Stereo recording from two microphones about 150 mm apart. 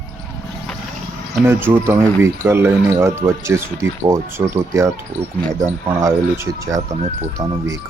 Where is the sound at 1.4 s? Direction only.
15° right (ahead or behind).